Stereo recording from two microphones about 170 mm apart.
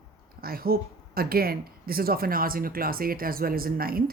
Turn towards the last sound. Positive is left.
turn(degrees=-60)  # may be behind; listen again after turning